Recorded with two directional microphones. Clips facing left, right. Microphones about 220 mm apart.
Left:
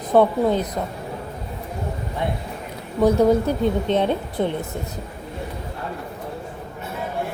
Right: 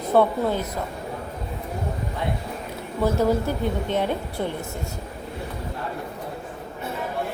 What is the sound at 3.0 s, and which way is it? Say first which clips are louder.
A woman's voice: left 5 dB; 20° left (ahead or behind).